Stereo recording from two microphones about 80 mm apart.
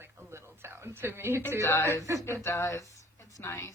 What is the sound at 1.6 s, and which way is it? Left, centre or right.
A woman's voice, left.